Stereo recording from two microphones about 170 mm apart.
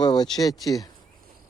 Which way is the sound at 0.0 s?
25° left (ahead or behind).